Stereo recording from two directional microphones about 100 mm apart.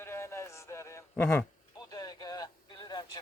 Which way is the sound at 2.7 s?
45° left (ahead or behind).